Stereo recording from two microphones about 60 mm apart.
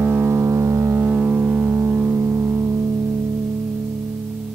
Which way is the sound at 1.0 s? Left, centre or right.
Right.